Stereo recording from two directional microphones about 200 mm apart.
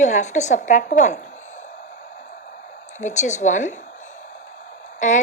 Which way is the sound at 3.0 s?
35° left (ahead or behind).